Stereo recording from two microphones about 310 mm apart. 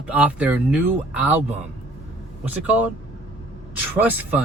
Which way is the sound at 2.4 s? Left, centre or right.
Centre.